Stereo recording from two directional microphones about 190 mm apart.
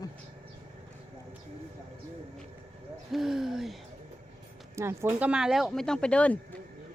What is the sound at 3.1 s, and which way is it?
Speech, centre (ahead or behind).